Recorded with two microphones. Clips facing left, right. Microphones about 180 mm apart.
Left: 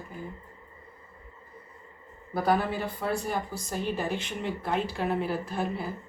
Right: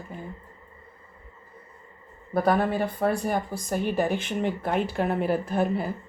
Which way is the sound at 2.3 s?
55° right (ahead or behind).